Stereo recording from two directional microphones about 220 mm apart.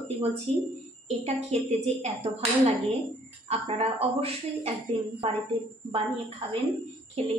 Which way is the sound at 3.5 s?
30° right (ahead or behind).